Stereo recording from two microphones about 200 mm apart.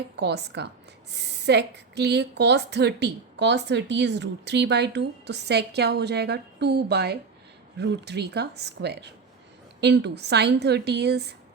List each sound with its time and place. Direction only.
0.2 s a woman's voice: 60° right (ahead or behind)